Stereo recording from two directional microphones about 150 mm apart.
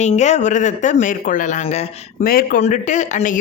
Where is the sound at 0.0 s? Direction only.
50° left (ahead or behind).